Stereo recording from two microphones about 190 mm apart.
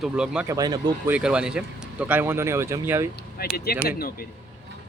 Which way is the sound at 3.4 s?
55° left (ahead or behind).